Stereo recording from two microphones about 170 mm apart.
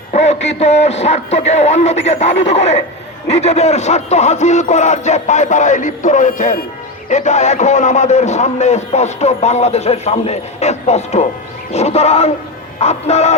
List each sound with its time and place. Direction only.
0.1 s a man's voice: 40° left (ahead or behind)